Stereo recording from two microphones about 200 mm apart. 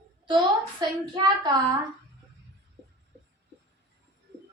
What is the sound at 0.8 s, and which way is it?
Speech, 20° right (ahead or behind).